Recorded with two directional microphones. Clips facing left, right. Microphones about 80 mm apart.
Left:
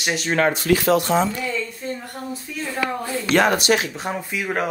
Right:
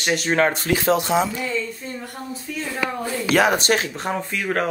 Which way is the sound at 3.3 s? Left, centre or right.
Centre.